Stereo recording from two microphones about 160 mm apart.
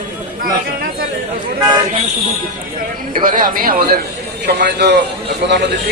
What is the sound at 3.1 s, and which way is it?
Speech, 60° right (ahead or behind).